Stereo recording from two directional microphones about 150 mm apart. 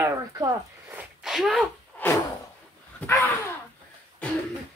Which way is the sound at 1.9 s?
15° left (ahead or behind).